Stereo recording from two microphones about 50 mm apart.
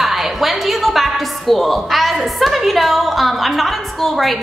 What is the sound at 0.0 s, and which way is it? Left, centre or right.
A woman's voice, centre.